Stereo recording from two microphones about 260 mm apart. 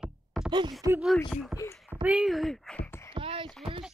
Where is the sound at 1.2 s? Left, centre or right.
Centre.